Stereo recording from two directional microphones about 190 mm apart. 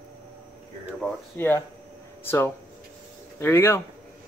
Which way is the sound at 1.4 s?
10° left (ahead or behind).